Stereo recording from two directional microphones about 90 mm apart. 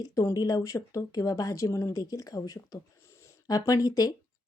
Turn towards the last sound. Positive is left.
turn(degrees=45)  # may be behind; listen again after turning